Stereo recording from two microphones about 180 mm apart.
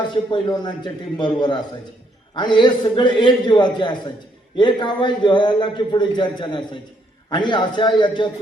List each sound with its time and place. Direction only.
0.1 s a man's voice: 25° left (ahead or behind)